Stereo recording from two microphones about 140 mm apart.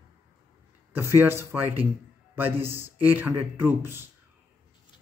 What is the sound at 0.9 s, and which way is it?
Speech, 15° right (ahead or behind).